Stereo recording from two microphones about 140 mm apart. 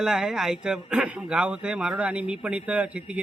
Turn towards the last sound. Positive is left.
turn(degrees=-10)  # may be behind; listen again after turning